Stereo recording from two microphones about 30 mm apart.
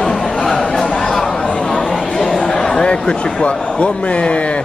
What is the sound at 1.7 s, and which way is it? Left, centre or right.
Chatter, centre.